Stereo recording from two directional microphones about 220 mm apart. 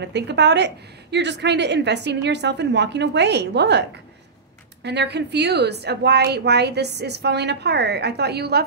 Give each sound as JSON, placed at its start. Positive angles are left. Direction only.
{"t": 0.0, "sound": "a woman's voice", "side_deg": -50}